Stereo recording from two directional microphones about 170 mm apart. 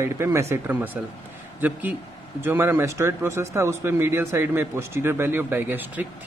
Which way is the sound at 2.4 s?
15° right (ahead or behind).